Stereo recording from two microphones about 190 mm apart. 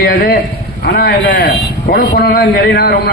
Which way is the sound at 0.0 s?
55° left (ahead or behind).